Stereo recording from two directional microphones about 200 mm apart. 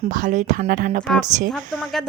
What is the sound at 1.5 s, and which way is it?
Speech, 5° right (ahead or behind).